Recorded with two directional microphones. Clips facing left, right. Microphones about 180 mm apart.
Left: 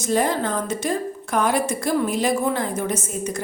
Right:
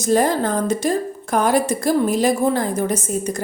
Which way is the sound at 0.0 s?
40° right (ahead or behind).